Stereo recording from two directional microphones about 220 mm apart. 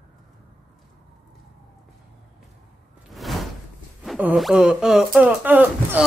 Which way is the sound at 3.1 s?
Centre (ahead or behind).